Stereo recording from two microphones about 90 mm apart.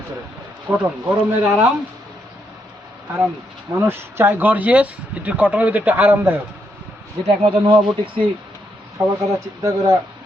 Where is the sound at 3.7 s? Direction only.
25° right (ahead or behind).